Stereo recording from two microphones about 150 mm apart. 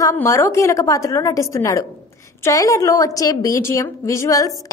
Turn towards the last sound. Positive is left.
turn(degrees=20)  # may be behind; listen again after turning